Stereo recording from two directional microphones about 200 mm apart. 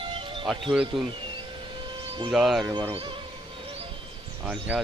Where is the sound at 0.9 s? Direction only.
Centre (ahead or behind).